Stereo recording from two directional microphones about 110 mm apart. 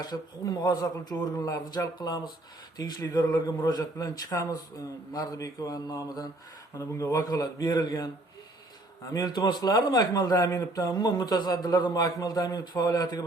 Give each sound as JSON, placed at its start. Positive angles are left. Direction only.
{"t": 0.0, "sound": "a man's voice", "side_deg": 35}
{"t": 9.1, "sound": "a man's voice", "side_deg": 35}